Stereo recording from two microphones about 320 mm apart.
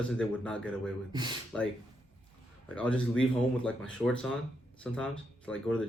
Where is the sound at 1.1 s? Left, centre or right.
Centre.